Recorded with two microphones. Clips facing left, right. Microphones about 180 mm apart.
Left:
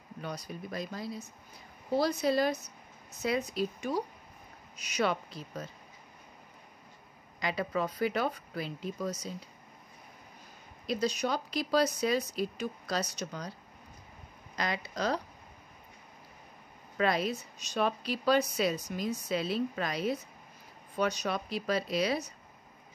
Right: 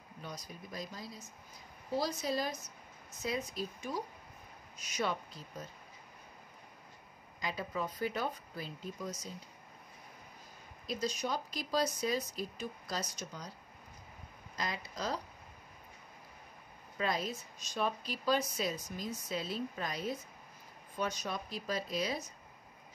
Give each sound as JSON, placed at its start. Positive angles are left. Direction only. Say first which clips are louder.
{"t": 0.2, "sound": "a woman's voice", "louder": "left 7 dB", "side_deg": 65}
{"t": 7.3, "sound": "a woman's voice", "louder": "left 6 dB", "side_deg": 75}
{"t": 10.9, "sound": "a woman's voice", "louder": "left 5 dB", "side_deg": 70}
{"t": 14.5, "sound": "speech", "louder": "left 5 dB", "side_deg": 75}
{"t": 16.9, "sound": "a woman's voice", "louder": "left 6 dB", "side_deg": 70}